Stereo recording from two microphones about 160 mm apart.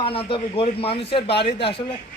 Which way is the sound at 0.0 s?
35° left (ahead or behind).